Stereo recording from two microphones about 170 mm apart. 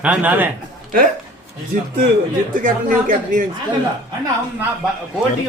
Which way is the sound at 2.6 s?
50° right (ahead or behind).